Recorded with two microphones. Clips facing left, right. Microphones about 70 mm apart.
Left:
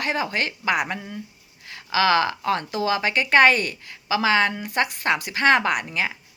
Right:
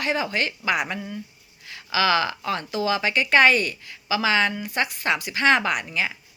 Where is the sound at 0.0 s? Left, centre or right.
Left.